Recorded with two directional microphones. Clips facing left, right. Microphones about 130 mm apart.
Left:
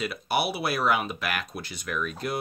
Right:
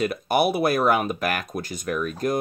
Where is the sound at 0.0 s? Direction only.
45° right (ahead or behind).